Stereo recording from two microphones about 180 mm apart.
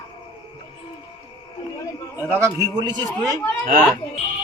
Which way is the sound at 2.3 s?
20° right (ahead or behind).